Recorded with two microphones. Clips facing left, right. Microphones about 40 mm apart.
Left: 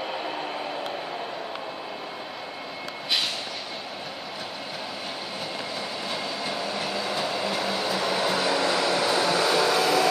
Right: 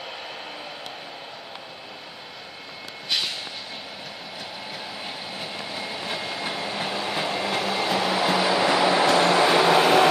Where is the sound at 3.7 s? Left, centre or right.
Centre; by 7.1 s right.